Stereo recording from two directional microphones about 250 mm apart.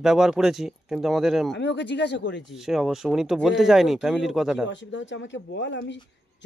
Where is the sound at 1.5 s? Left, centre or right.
Left.